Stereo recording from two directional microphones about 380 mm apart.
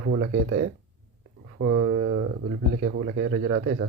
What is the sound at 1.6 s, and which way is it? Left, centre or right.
Speech, right.